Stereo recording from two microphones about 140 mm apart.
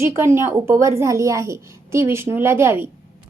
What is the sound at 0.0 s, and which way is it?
A woman's voice, 20° right (ahead or behind).